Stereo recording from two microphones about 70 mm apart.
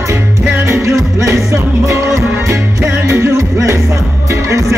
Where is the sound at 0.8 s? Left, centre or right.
Right.